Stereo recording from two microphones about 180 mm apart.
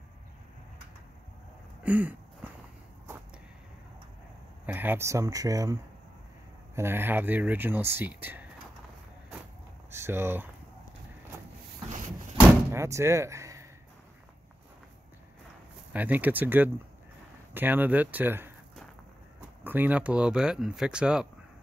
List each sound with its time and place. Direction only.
1.8 s a sound: 10° right (ahead or behind)
4.6 s speech: 10° right (ahead or behind)
9.8 s speech: 15° right (ahead or behind)
12.7 s speech: 15° right (ahead or behind)
15.9 s speech: 10° right (ahead or behind)